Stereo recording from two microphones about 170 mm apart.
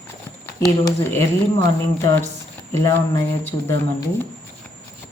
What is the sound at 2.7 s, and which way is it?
Speech, 15° left (ahead or behind).